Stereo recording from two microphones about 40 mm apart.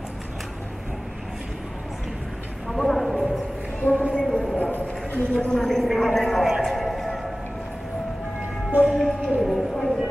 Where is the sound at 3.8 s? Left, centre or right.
Left.